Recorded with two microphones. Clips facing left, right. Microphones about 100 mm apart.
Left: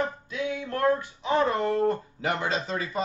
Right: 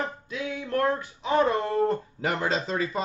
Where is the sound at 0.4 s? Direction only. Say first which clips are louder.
Right 1 dB; 25° left (ahead or behind).